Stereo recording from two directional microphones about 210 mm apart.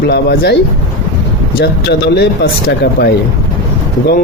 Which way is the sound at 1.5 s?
50° left (ahead or behind).